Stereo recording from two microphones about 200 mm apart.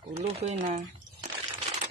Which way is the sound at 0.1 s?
35° right (ahead or behind).